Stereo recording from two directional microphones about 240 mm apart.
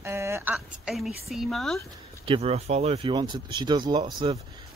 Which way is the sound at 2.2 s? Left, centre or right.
Right.